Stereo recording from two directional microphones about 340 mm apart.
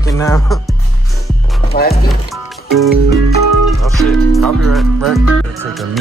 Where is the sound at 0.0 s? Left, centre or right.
Centre.